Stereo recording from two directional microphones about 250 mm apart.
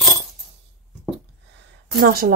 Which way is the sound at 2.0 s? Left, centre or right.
Right.